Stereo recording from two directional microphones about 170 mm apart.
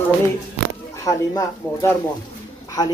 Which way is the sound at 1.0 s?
20° left (ahead or behind).